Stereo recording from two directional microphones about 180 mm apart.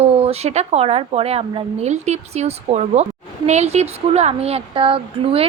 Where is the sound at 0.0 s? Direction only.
35° right (ahead or behind).